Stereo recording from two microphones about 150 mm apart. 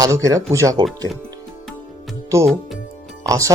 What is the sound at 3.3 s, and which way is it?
Speech, 20° right (ahead or behind).